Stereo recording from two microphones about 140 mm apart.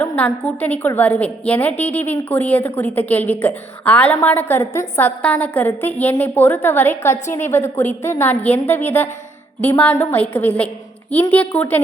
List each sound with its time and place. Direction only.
0.0 s a woman's voice: 10° left (ahead or behind)